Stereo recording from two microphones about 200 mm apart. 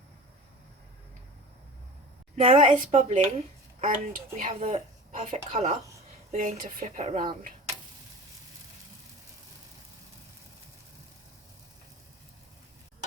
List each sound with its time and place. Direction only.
2.3 s speech: 35° right (ahead or behind)